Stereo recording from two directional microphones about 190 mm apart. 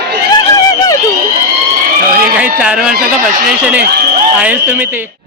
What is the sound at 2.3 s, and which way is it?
Speech, 5° right (ahead or behind).